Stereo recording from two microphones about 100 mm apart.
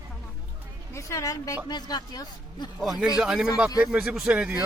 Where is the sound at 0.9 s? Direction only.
30° left (ahead or behind).